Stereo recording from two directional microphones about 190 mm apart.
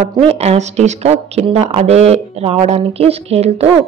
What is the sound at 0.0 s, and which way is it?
Speech, 35° right (ahead or behind).